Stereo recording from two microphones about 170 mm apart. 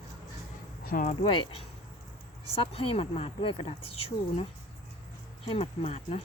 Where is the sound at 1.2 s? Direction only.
30° left (ahead or behind).